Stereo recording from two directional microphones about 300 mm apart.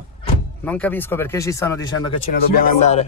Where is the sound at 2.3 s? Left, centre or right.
Left.